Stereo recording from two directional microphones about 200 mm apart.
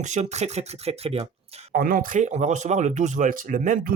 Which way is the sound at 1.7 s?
45° right (ahead or behind).